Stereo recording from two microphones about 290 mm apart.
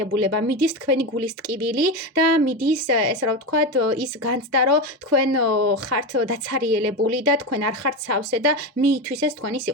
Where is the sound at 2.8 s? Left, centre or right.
Right.